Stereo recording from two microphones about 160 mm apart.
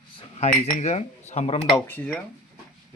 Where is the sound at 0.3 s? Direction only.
45° left (ahead or behind).